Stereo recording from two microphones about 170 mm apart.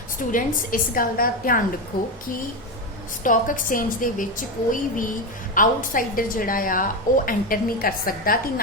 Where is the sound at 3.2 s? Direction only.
50° left (ahead or behind).